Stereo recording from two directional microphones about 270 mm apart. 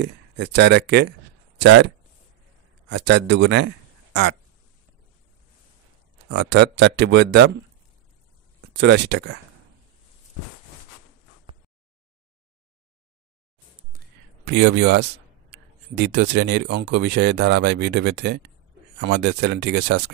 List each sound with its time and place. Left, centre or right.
0.0 s speech: right
2.9 s a man's voice: right
6.2 s speech: right
8.5 s speech: right
13.9 s a sound: right
15.5 s speech: right